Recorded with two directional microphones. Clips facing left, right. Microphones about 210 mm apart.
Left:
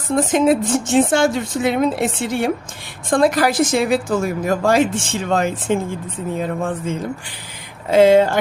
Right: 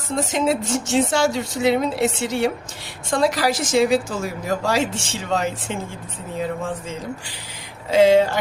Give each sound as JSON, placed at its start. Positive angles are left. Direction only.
{"t": 0.2, "sound": "a woman's voice", "side_deg": 50}